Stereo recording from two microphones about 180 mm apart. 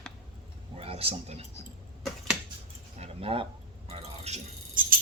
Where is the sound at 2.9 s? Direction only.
35° right (ahead or behind).